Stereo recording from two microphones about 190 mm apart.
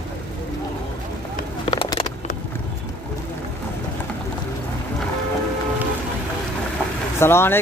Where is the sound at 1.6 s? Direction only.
25° left (ahead or behind).